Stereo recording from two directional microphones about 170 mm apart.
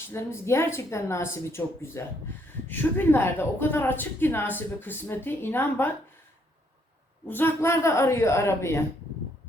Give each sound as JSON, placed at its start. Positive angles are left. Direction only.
{"t": 0.1, "sound": "a woman's voice", "side_deg": 15}
{"t": 7.3, "sound": "a woman's voice", "side_deg": 10}